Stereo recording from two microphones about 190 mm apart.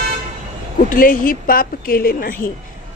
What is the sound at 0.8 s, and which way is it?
A man's voice, 45° left (ahead or behind).